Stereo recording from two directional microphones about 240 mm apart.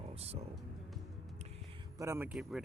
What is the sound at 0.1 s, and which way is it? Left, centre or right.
Music, right.